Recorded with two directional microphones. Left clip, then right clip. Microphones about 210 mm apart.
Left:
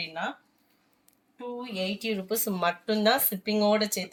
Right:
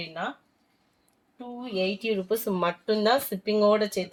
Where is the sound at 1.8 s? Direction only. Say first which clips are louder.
Right 5 dB; 40° right (ahead or behind).